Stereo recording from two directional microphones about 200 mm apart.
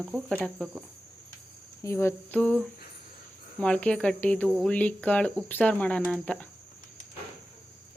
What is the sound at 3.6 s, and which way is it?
Speech, 5° left (ahead or behind).